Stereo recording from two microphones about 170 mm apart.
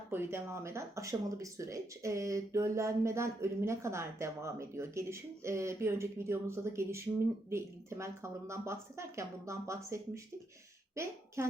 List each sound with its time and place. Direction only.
0.1 s a woman's voice: 15° right (ahead or behind)